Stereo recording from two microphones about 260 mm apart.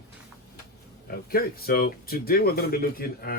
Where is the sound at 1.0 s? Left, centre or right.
Left.